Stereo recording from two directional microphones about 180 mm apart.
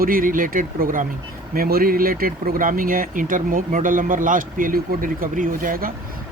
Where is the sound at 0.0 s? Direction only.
50° right (ahead or behind).